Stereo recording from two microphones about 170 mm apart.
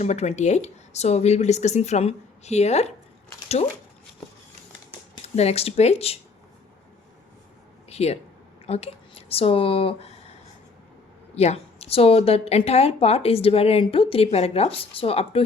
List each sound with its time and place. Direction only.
0.0 s a woman's voice: 40° left (ahead or behind)
5.2 s a woman's voice: 40° left (ahead or behind)
7.9 s speech: 40° left (ahead or behind)
11.3 s a woman's voice: 40° left (ahead or behind)